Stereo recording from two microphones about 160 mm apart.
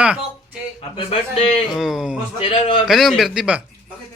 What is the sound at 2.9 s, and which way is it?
Speech, centre (ahead or behind).